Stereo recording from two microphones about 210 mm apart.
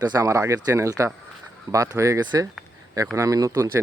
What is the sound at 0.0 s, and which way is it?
Speech, 15° right (ahead or behind).